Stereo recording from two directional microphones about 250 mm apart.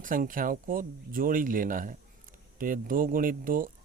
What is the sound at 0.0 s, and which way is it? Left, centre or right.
Speech, right.